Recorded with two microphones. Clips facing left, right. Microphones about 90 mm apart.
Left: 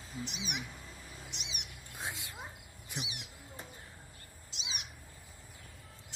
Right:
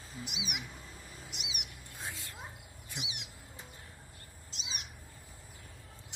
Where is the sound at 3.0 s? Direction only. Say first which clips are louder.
Even; 20° right (ahead or behind).